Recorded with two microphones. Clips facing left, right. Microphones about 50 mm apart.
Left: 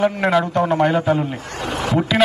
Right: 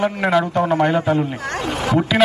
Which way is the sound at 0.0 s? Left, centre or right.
Centre.